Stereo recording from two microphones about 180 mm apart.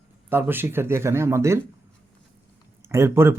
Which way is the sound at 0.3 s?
10° right (ahead or behind).